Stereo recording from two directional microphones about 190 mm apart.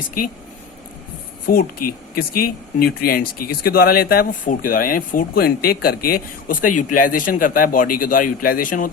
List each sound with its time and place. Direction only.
1.5 s speech: 50° left (ahead or behind)